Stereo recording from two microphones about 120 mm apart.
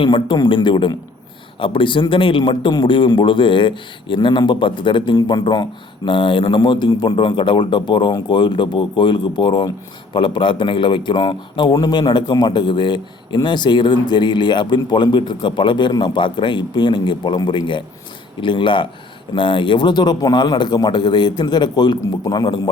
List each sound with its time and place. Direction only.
0.0 s speech: 40° left (ahead or behind)